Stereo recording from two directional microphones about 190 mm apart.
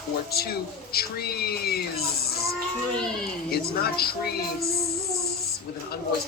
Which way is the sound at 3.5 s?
55° left (ahead or behind).